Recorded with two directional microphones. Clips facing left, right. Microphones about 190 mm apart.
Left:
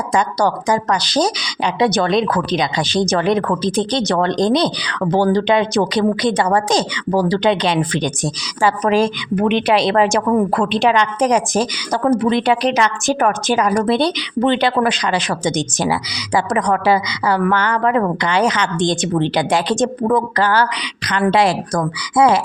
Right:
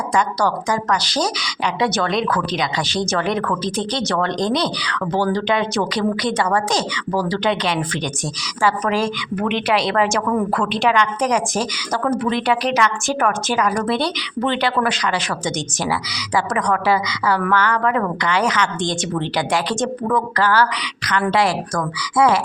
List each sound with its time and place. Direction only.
0.1 s a woman's voice: 20° left (ahead or behind)